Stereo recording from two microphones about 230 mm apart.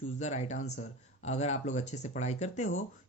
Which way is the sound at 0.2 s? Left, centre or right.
Left.